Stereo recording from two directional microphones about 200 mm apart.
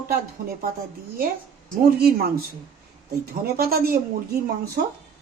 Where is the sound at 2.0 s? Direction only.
50° right (ahead or behind).